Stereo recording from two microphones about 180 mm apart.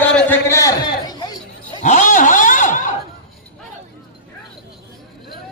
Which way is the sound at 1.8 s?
40° left (ahead or behind).